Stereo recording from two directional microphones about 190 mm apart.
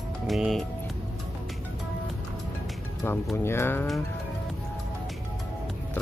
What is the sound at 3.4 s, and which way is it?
Speech, 10° left (ahead or behind).